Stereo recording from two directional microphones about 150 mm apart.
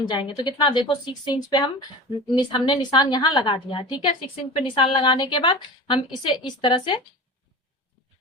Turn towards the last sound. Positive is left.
turn(degrees=30)  # may be behind; listen again after turning